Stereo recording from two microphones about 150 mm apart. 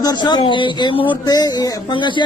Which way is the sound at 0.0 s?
30° left (ahead or behind).